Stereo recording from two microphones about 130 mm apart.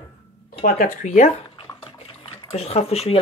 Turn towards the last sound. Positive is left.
turn(degrees=50)  # may be behind; listen again after turning